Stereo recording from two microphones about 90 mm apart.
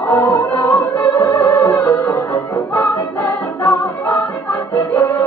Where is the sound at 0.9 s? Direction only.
35° left (ahead or behind).